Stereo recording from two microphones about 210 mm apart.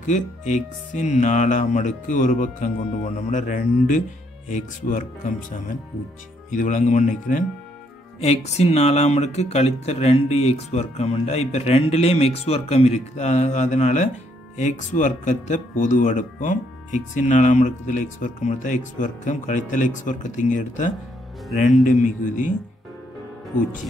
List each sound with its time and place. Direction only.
0.0 s speech: 35° left (ahead or behind)